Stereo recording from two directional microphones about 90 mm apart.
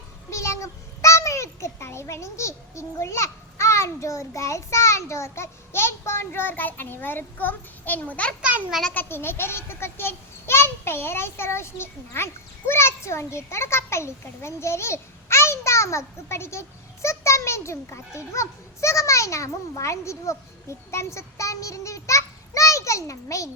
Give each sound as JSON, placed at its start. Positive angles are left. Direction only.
{"t": 0.3, "sound": "a child's voice", "side_deg": 35}
{"t": 8.4, "sound": "a child's voice", "side_deg": -15}
{"t": 8.9, "sound": "a child's voice", "side_deg": 25}